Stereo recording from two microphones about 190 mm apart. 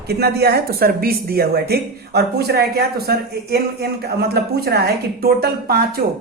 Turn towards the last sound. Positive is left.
turn(degrees=-55)  # may be behind; listen again after turning